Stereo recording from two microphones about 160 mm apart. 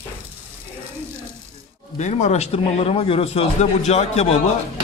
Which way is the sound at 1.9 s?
45° left (ahead or behind).